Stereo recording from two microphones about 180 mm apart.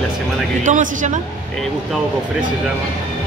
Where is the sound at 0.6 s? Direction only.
45° right (ahead or behind).